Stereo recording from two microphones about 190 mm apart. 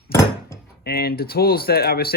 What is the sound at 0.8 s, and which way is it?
Speech, 55° left (ahead or behind).